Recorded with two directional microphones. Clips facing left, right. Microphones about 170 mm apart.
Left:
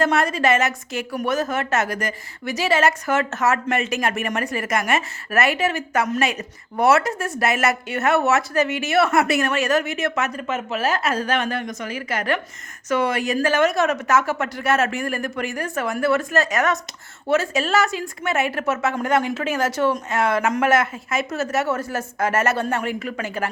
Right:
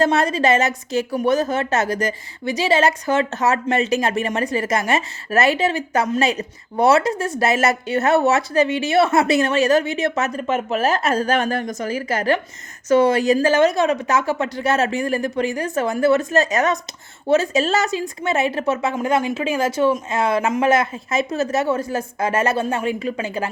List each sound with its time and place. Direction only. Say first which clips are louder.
0.0 s a woman's voice: right 2 dB; 30° right (ahead or behind)
18.8 s speech: right 1 dB; 15° right (ahead or behind)